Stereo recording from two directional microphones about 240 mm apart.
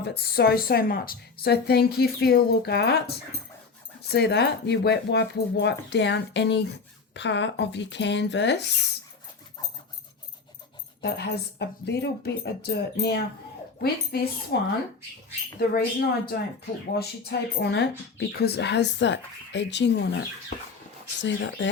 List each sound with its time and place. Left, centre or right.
0.0 s a woman's voice: left
11.0 s a woman's voice: left
21.2 s a woman's voice: left